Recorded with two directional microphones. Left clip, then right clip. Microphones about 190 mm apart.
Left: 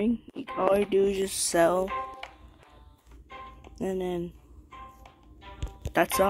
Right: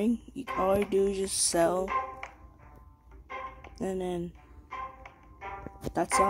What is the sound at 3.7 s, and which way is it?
Mechanisms, centre (ahead or behind).